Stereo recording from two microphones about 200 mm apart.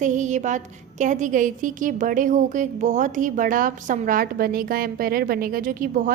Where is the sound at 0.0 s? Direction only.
35° right (ahead or behind).